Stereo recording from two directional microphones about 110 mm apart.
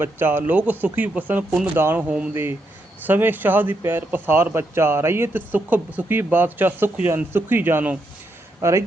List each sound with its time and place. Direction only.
0.0 s speech: 20° right (ahead or behind)
2.3 s speech: 20° right (ahead or behind)